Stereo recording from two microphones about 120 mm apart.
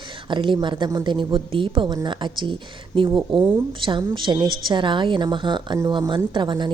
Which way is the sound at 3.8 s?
45° right (ahead or behind).